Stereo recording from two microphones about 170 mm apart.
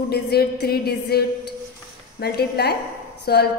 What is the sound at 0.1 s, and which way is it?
A woman's voice, 70° left (ahead or behind).